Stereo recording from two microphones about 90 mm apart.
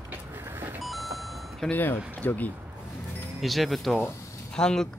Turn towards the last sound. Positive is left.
turn(degrees=5)  # may be behind; listen again after turning